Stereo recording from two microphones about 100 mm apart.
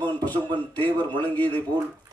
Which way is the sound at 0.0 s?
20° left (ahead or behind).